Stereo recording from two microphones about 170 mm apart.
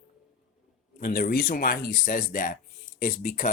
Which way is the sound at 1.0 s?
55° left (ahead or behind).